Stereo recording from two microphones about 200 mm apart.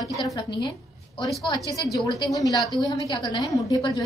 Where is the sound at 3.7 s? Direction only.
20° left (ahead or behind).